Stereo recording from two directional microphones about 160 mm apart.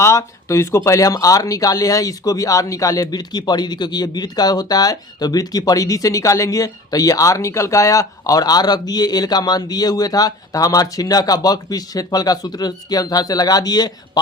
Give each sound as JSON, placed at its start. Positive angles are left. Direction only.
{"t": 0.0, "sound": "speech", "side_deg": 20}